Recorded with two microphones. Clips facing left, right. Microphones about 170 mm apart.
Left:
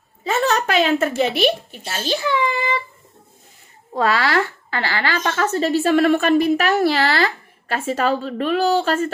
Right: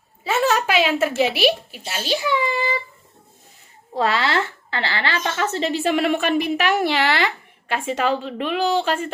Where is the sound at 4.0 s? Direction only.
25° right (ahead or behind).